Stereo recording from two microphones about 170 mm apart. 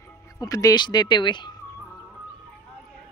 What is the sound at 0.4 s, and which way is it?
Speech, 20° left (ahead or behind).